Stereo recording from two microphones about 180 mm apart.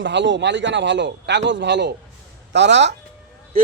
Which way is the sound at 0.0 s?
80° right.